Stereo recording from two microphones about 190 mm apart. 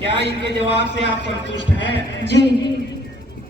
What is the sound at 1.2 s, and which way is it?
Speech, 70° left (ahead or behind).